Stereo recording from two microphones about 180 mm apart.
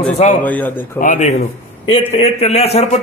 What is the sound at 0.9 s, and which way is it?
A man's voice, 45° left (ahead or behind).